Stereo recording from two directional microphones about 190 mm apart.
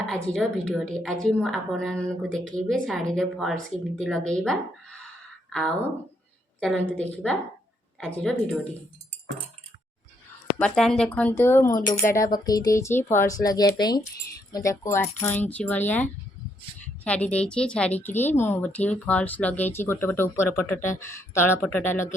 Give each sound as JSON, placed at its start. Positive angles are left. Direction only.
{"t": 0.1, "sound": "a woman's voice", "side_deg": 5}
{"t": 10.6, "sound": "a woman's voice", "side_deg": 5}